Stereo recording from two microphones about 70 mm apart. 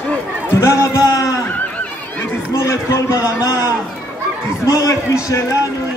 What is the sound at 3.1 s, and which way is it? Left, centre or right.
Speech, left.